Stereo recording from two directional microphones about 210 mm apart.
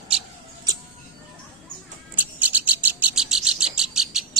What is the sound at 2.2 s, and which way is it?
Bird, 10° right (ahead or behind).